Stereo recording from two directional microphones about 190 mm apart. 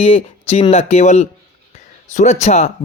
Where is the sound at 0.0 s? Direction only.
30° left (ahead or behind).